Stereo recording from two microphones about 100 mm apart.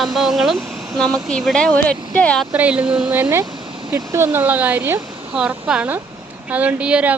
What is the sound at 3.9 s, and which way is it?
Speech, 25° right (ahead or behind).